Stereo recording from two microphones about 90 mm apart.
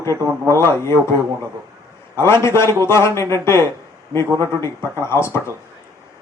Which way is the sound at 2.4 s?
30° left (ahead or behind).